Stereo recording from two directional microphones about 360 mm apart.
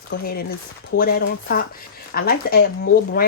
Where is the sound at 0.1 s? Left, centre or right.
Left.